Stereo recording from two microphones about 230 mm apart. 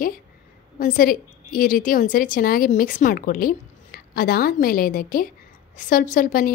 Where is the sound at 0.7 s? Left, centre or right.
Left.